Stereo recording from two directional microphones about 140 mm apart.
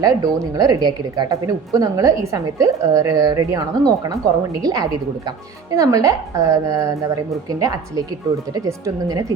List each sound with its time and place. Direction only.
0.0 s a woman's voice: 25° right (ahead or behind)